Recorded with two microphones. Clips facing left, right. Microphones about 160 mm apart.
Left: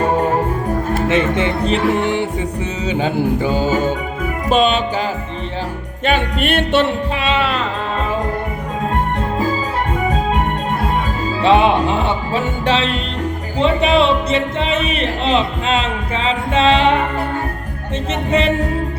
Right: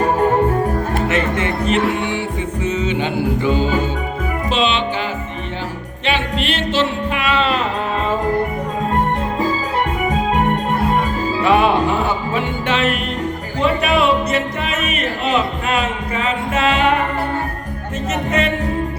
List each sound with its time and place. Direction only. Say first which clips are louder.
1.0 s speech: left 5 dB; 30° left (ahead or behind)
2.8 s music: left 5 dB; 40° left (ahead or behind)
6.1 s music: left 3 dB; 50° left (ahead or behind)
11.4 s music: left 2 dB; 25° left (ahead or behind)
13.6 s speech: left 2 dB; 25° left (ahead or behind)
18.3 s music: left 4 dB; 30° left (ahead or behind)